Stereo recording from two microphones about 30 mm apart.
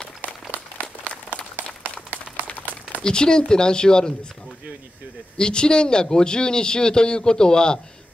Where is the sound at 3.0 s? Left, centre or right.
Left.